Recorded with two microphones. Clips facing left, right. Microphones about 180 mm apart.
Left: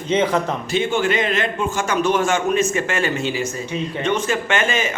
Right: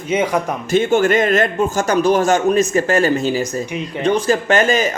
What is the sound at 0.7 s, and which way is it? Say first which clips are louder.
A man's voice: right 6 dB; 45° right (ahead or behind).